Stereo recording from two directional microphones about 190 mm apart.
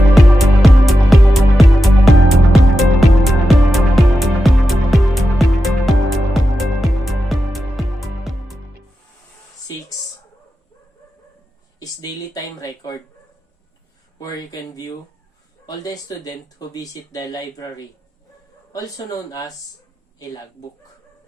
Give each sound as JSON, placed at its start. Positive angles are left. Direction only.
{"t": 0.1, "sound": "music", "side_deg": 0}
{"t": 11.8, "sound": "a sound", "side_deg": 20}
{"t": 15.6, "sound": "speech", "side_deg": 20}